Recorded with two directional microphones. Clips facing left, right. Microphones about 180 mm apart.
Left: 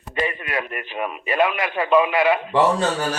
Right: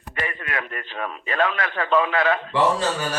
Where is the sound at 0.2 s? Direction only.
15° left (ahead or behind).